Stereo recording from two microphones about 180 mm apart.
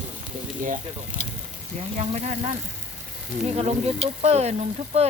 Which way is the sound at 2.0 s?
40° right (ahead or behind).